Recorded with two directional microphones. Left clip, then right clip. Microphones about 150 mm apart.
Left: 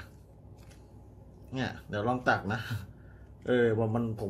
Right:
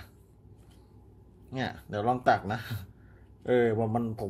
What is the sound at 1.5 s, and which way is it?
Speech, 45° right (ahead or behind).